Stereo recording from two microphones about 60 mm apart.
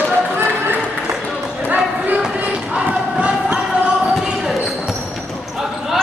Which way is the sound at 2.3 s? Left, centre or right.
Centre.